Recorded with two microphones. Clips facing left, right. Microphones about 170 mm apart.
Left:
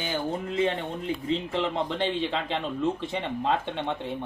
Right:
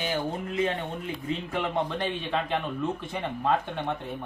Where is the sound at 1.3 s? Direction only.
30° left (ahead or behind).